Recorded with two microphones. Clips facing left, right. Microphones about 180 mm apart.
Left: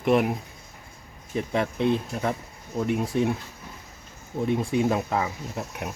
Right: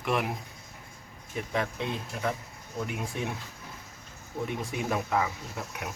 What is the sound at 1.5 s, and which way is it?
Speech, 30° left (ahead or behind).